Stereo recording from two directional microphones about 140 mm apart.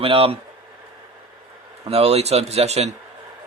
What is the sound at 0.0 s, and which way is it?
Speech, 40° right (ahead or behind).